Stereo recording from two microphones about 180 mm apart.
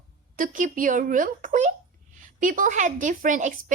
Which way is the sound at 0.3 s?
45° right (ahead or behind).